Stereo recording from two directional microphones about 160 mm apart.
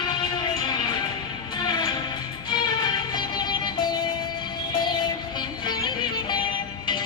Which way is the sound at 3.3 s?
25° left (ahead or behind).